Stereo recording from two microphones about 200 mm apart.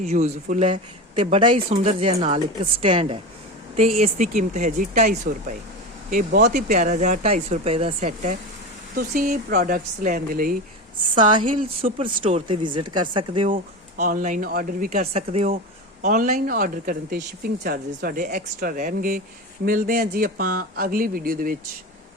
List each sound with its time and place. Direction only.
0.0 s speech: 35° right (ahead or behind)
0.7 s speech: 25° right (ahead or behind); by 10.6 s 45° right (ahead or behind)
11.1 s speech: 25° right (ahead or behind)
13.5 s speech: 45° right (ahead or behind)
15.1 s speech: 30° right (ahead or behind)